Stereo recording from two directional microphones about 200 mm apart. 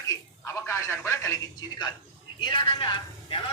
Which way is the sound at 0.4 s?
15° left (ahead or behind).